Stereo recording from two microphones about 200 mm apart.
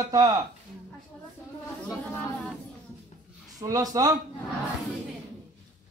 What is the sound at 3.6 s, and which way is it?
Speech, 20° right (ahead or behind).